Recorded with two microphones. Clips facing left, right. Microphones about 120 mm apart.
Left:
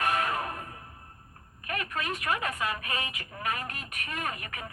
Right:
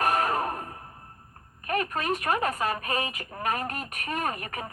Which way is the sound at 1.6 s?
40° right (ahead or behind).